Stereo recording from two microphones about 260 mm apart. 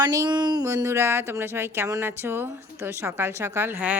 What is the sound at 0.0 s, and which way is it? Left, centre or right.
Speech, centre.